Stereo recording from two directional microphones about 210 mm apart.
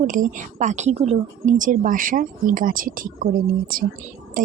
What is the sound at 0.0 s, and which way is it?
Speech, 35° right (ahead or behind).